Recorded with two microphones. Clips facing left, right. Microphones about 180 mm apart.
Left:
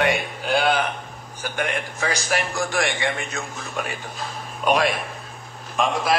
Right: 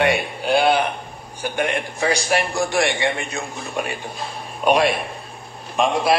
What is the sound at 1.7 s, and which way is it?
A man's voice, 30° right (ahead or behind).